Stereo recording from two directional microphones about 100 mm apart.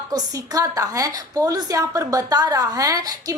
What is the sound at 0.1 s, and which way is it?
A woman's voice, 40° right (ahead or behind).